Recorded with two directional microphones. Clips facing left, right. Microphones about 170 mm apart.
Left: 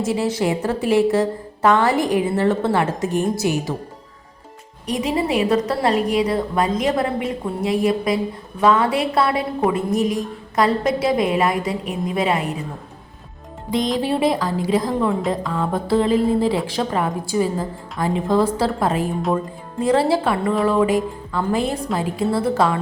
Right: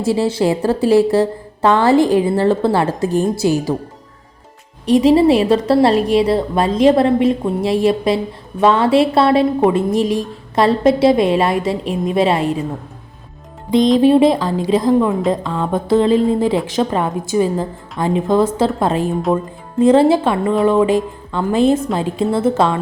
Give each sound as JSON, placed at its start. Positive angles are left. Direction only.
{"t": 0.0, "sound": "a woman's voice", "side_deg": -30}
{"t": 4.9, "sound": "a woman's voice", "side_deg": -30}
{"t": 13.7, "sound": "a woman's voice", "side_deg": -20}